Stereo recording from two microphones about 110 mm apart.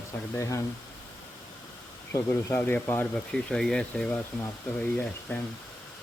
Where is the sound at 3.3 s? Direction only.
5° left (ahead or behind).